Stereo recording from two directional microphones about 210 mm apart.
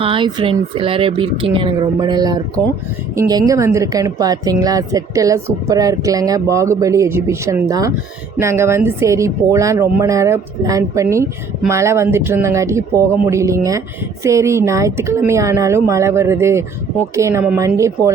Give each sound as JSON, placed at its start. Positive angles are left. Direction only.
{"t": 0.0, "sound": "speech", "side_deg": -25}